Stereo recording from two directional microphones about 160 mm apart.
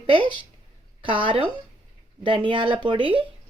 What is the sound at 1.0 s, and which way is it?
Speech, 30° right (ahead or behind).